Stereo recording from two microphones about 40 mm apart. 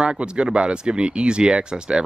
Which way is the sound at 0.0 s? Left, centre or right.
Right.